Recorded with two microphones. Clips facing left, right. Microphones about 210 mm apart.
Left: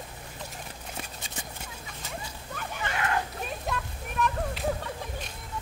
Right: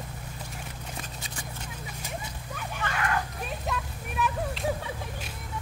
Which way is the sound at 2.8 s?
20° left (ahead or behind).